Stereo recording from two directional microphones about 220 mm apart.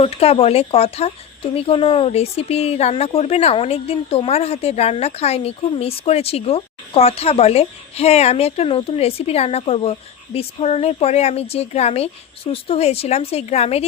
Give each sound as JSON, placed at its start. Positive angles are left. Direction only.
{"t": 0.0, "sound": "speech", "side_deg": 25}